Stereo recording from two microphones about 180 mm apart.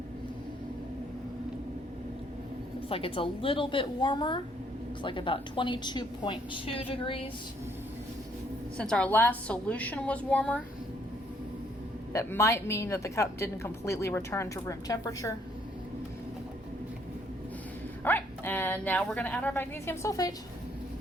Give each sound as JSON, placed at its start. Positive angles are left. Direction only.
{"t": 2.9, "sound": "a woman's voice", "side_deg": 30}
{"t": 8.8, "sound": "a woman's voice", "side_deg": 5}
{"t": 12.1, "sound": "a woman's voice", "side_deg": 15}
{"t": 18.0, "sound": "a woman's voice", "side_deg": 10}